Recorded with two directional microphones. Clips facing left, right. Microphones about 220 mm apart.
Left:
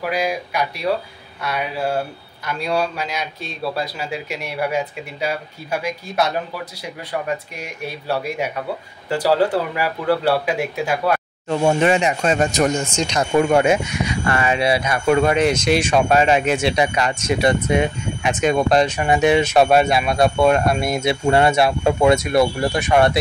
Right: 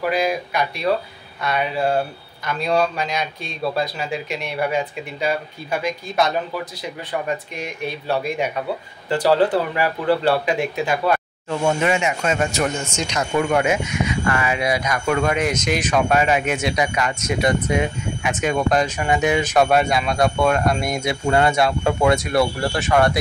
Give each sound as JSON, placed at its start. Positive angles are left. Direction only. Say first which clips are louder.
{"t": 0.0, "sound": "a man's voice", "louder": "right 1 dB", "side_deg": 10}
{"t": 11.4, "sound": "speech", "louder": "left 4 dB", "side_deg": 35}